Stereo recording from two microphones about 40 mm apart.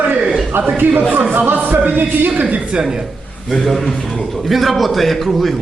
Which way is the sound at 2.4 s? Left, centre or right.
Right.